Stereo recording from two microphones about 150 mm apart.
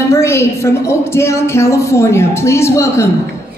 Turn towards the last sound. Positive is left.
turn(degrees=20)  # may be behind; listen again after turning